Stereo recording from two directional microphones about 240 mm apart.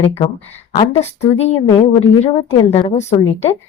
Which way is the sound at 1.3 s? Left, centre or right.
Left.